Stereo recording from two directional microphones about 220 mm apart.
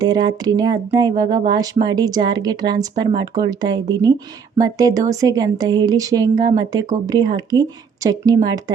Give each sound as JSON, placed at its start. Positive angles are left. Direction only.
{"t": 0.0, "sound": "speech", "side_deg": -20}